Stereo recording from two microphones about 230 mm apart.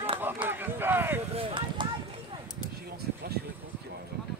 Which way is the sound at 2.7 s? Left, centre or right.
Right.